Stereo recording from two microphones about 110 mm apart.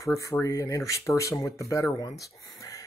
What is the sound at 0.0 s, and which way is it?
Speech, 25° left (ahead or behind).